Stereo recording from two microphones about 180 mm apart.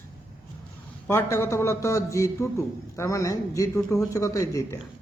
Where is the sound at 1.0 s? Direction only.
15° left (ahead or behind).